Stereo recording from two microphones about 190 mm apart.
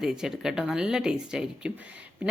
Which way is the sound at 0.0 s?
5° right (ahead or behind).